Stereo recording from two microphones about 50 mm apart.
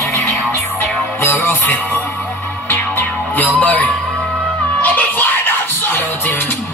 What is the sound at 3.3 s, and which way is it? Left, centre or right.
Music, left.